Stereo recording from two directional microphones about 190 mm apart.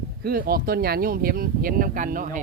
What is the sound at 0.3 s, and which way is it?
Speech, 50° right (ahead or behind).